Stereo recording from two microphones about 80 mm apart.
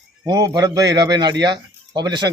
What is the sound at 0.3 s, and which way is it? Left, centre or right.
A man's voice, right.